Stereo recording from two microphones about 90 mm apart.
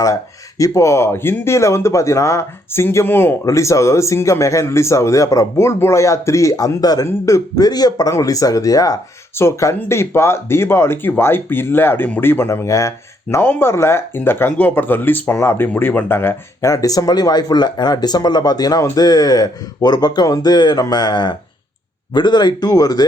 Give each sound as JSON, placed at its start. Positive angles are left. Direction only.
{"t": 0.6, "sound": "speech", "side_deg": 35}
{"t": 3.4, "sound": "speech", "side_deg": 35}
{"t": 13.3, "sound": "speech", "side_deg": 25}
{"t": 16.6, "sound": "speech", "side_deg": 40}